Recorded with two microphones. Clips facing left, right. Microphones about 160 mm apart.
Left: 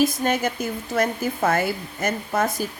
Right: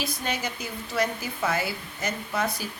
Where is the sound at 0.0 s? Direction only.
45° left (ahead or behind).